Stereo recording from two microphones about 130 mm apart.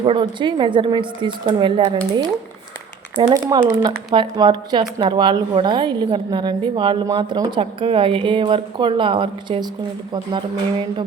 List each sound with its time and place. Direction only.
0.0 s speech: 40° right (ahead or behind)
3.3 s speech: 30° right (ahead or behind)
7.6 s speech: 45° right (ahead or behind)